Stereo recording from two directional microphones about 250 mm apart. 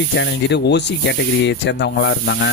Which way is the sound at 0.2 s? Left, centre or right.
Left.